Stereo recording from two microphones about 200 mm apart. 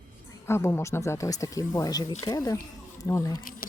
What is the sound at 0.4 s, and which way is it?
Speech, 10° left (ahead or behind).